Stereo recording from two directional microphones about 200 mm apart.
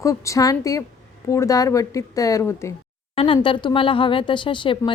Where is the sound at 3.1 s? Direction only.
25° left (ahead or behind).